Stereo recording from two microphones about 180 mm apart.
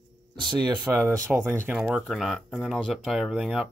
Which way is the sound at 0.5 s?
25° right (ahead or behind).